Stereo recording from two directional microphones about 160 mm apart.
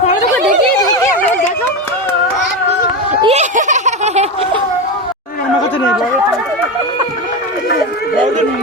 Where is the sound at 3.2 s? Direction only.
45° right (ahead or behind).